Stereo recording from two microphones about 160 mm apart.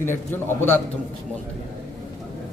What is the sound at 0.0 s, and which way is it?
Speech, 15° left (ahead or behind).